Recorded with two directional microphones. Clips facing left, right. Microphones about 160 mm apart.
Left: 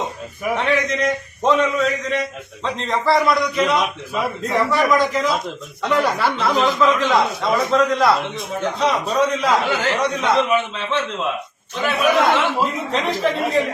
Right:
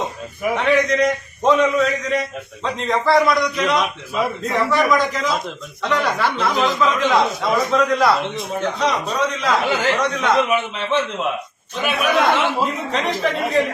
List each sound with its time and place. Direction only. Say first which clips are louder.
0.5 s a man's voice: right 3 dB; centre (ahead or behind)
9.6 s a man's voice: right 1 dB; 15° right (ahead or behind)
9.9 s speech: even; 10° left (ahead or behind)
10.3 s a man's voice: even; 15° right (ahead or behind)
12.9 s a man's voice: left 1 dB; centre (ahead or behind)